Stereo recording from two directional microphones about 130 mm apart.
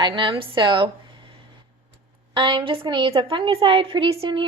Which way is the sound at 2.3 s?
35° right (ahead or behind).